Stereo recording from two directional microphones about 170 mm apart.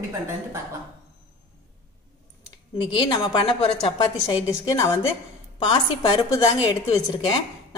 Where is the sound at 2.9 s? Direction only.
30° left (ahead or behind).